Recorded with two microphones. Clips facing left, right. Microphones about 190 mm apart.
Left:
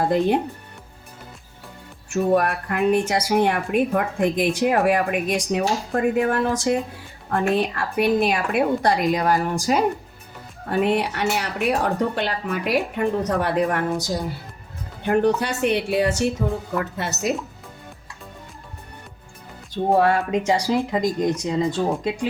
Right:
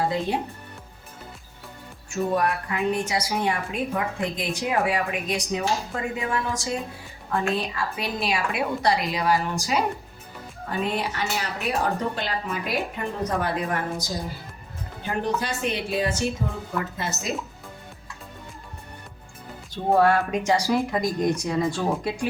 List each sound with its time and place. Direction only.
2.3 s a woman's voice: 55° left (ahead or behind)
10.7 s speech: 65° left (ahead or behind)
19.9 s speech: 20° left (ahead or behind)